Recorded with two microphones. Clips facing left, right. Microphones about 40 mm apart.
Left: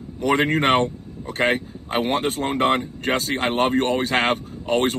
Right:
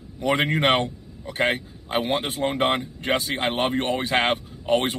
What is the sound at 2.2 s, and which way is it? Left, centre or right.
Speech, left.